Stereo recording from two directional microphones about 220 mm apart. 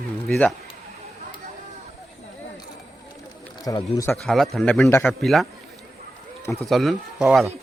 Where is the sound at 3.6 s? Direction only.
15° left (ahead or behind).